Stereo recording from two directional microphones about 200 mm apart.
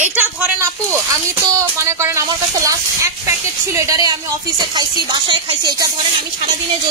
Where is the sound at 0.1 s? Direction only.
10° right (ahead or behind).